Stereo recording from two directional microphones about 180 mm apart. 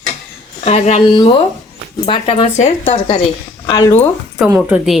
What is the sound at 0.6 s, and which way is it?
Speech, 35° left (ahead or behind).